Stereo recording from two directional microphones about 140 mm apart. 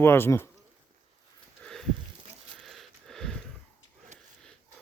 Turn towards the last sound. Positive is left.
turn(degrees=5)  # may be behind; listen again after turning